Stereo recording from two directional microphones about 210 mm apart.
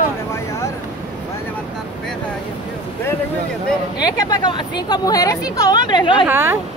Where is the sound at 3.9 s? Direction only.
20° left (ahead or behind).